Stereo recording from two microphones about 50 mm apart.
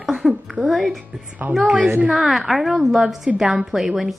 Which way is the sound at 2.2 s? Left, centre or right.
Centre.